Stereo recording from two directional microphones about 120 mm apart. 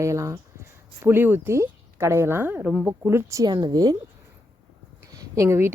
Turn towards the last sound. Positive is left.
turn(degrees=-25)  # may be behind; listen again after turning